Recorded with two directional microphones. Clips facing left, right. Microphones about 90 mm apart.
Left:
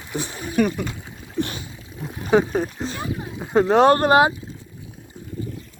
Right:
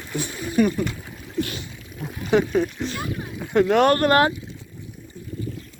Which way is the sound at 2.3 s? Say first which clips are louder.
Left 1 dB; 35° left (ahead or behind).